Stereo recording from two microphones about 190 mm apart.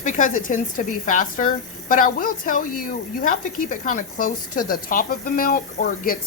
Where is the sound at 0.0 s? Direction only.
40° left (ahead or behind).